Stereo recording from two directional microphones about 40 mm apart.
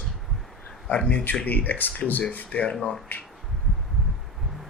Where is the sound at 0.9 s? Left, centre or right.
Left.